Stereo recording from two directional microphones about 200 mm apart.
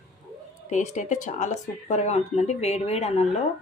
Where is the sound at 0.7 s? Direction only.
35° left (ahead or behind).